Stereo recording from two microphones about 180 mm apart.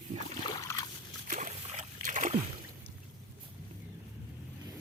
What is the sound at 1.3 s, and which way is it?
Splash, 45° right (ahead or behind).